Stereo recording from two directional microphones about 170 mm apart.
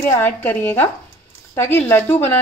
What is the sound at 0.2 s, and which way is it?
A woman's voice, 10° left (ahead or behind).